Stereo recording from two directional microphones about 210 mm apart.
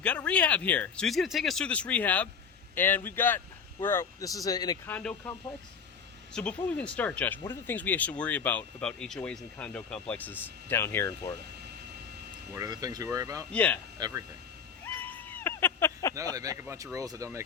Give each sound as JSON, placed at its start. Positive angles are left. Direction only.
{"t": 0.0, "sound": "speech", "side_deg": 5}
{"t": 4.9, "sound": "speech", "side_deg": 10}
{"t": 12.5, "sound": "speech", "side_deg": -15}
{"t": 13.5, "sound": "speech", "side_deg": 5}
{"t": 14.0, "sound": "speech", "side_deg": -15}
{"t": 15.0, "sound": "a sound", "side_deg": 10}
{"t": 16.1, "sound": "speech", "side_deg": -15}